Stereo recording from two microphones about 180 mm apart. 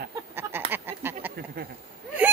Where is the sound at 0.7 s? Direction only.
10° right (ahead or behind).